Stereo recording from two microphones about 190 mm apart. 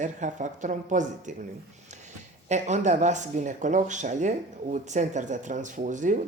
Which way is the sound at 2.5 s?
40° right (ahead or behind).